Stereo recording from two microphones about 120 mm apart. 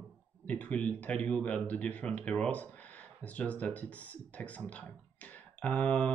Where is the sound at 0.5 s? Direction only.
10° left (ahead or behind).